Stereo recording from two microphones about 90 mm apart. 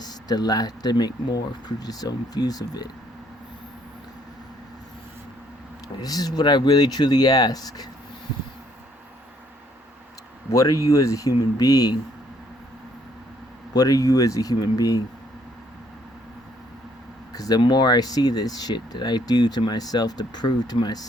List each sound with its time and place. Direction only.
0.0 s speech: 50° left (ahead or behind)
6.0 s speech: 45° left (ahead or behind)
10.5 s speech: 35° left (ahead or behind)
13.7 s speech: 40° left (ahead or behind)
17.3 s speech: 40° left (ahead or behind)
17.6 s speech: 55° left (ahead or behind)